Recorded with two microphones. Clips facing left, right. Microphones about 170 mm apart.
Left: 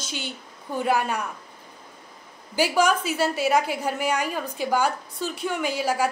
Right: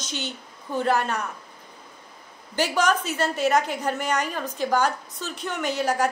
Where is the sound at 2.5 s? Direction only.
10° left (ahead or behind).